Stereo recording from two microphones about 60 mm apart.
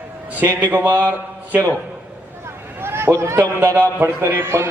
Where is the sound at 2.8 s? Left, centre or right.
Right.